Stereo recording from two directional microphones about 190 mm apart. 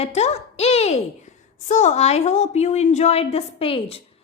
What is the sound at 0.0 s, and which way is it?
A woman's voice, 35° left (ahead or behind).